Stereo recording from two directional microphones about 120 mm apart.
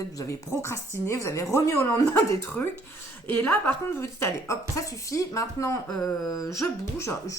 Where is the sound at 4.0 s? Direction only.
25° left (ahead or behind).